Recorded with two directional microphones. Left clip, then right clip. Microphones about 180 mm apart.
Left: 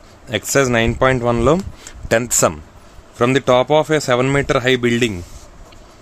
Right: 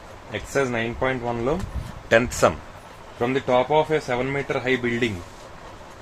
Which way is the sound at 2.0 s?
55° left (ahead or behind).